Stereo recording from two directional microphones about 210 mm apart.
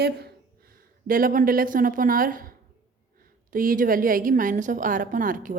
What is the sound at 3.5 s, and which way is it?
A woman's voice, 40° right (ahead or behind).